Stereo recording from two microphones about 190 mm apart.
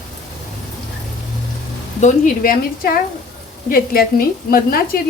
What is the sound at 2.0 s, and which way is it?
A woman's voice, 40° left (ahead or behind).